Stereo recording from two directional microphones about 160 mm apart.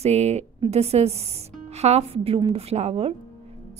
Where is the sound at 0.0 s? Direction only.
40° right (ahead or behind).